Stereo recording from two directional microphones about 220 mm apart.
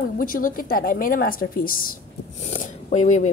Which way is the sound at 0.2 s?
40° left (ahead or behind).